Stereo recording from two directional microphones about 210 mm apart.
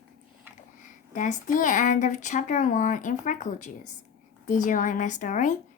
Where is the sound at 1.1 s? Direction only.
35° left (ahead or behind).